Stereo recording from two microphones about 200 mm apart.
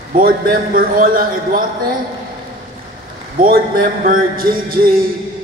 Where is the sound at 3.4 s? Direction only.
45° right (ahead or behind).